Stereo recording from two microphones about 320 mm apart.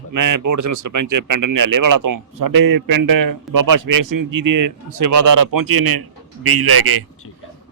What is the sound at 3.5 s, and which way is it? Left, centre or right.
A man's voice, right.